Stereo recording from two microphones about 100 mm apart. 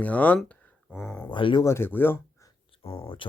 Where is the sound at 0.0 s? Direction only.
15° left (ahead or behind).